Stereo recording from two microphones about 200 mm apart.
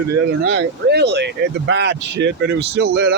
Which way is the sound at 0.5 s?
55° right (ahead or behind).